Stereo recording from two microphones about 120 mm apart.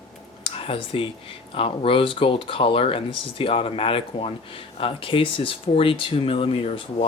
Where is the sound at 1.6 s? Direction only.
50° left (ahead or behind).